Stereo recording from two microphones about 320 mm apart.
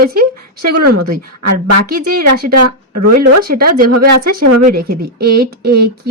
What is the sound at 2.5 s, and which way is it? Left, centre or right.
Speech, right.